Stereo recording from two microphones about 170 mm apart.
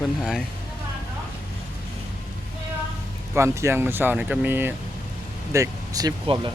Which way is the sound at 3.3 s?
15° right (ahead or behind).